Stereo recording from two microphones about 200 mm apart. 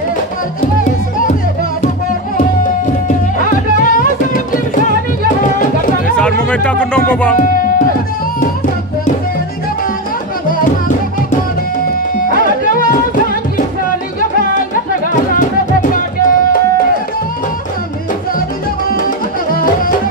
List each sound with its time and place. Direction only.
3.4 s music: 40° left (ahead or behind)
6.1 s speech: 5° left (ahead or behind)
15.9 s music: 45° left (ahead or behind)
19.5 s music: 45° left (ahead or behind)